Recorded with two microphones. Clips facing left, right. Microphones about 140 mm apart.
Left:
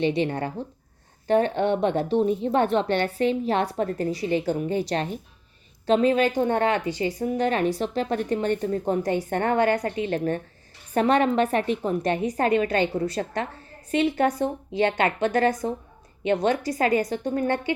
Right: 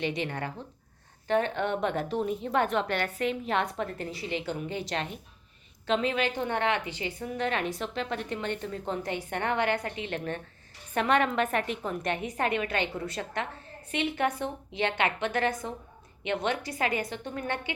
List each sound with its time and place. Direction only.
0.0 s a woman's voice: 30° left (ahead or behind)